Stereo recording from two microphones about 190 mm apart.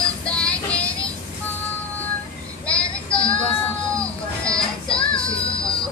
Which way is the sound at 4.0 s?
5° left (ahead or behind).